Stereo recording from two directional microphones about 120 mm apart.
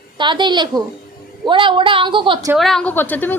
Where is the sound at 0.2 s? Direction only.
40° right (ahead or behind).